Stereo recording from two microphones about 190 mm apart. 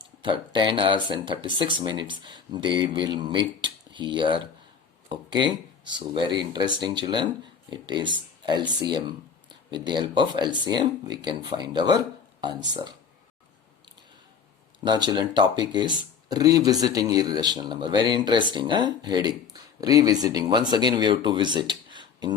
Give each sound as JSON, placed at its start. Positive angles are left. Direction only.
{"t": 0.0, "sound": "speech", "side_deg": -25}
{"t": 14.8, "sound": "speech", "side_deg": -20}